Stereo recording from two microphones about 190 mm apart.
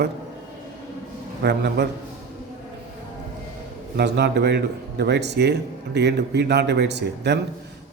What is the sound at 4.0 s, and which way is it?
A man's voice, 60° right (ahead or behind).